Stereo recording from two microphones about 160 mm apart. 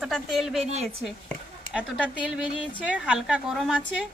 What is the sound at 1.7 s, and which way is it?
A woman's voice, 5° right (ahead or behind).